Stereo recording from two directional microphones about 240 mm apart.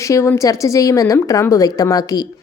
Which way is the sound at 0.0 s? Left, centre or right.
Centre.